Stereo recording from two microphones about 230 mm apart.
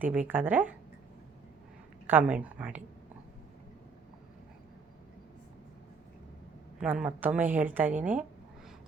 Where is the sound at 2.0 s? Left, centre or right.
Centre.